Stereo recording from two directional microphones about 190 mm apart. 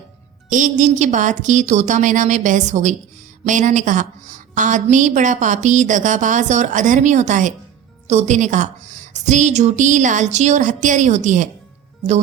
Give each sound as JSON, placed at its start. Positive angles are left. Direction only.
{"t": 0.5, "sound": "a woman's voice", "side_deg": -40}